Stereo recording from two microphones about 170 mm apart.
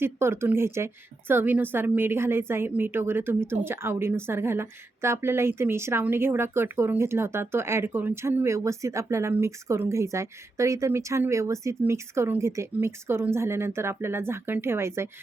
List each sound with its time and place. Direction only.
0.0 s a woman's voice: 15° right (ahead or behind)